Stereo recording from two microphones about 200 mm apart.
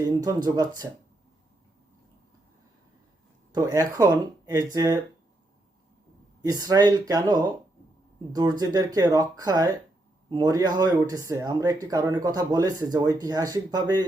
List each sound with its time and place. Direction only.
0.3 s speech: 20° right (ahead or behind)
3.5 s speech: 15° right (ahead or behind)
6.4 s speech: 20° right (ahead or behind)